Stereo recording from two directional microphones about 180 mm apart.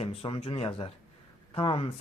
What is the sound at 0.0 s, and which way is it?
Speech, 30° left (ahead or behind).